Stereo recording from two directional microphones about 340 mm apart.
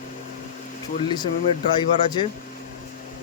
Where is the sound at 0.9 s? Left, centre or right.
Centre.